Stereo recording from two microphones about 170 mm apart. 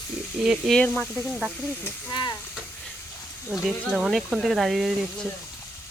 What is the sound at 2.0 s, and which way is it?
Speech, 25° left (ahead or behind).